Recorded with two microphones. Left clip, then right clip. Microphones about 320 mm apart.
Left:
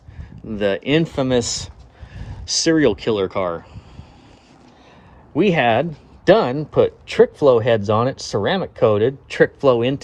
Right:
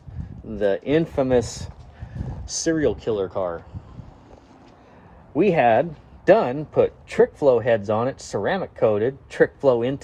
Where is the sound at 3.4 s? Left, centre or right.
Left.